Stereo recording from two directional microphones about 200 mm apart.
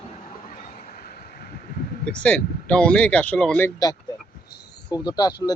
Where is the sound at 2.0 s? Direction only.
5° left (ahead or behind).